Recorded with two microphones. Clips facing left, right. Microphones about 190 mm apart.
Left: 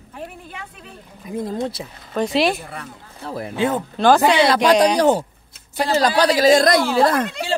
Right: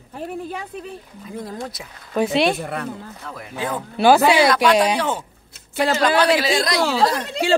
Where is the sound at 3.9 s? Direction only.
10° right (ahead or behind).